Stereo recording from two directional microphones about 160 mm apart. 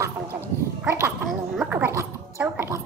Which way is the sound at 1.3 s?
5° right (ahead or behind).